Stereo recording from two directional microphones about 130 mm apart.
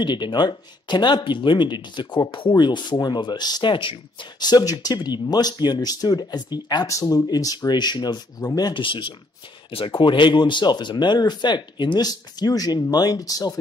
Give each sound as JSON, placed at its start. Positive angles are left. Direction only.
{"t": 0.0, "sound": "speech", "side_deg": 35}